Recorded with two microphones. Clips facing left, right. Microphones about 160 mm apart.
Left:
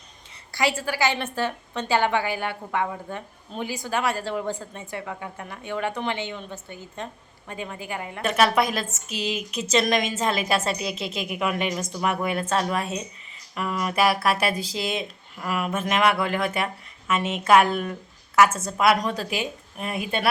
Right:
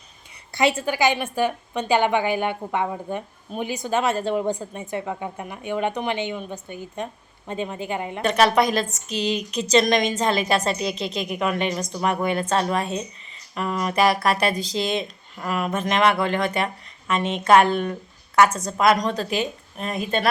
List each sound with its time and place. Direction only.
0.5 s a woman's voice: 20° right (ahead or behind)
8.2 s a woman's voice: 5° left (ahead or behind)